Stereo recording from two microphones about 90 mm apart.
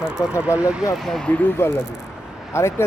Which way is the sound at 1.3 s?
20° left (ahead or behind).